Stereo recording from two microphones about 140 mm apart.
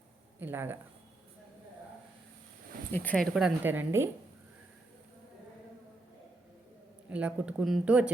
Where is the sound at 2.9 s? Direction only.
10° left (ahead or behind).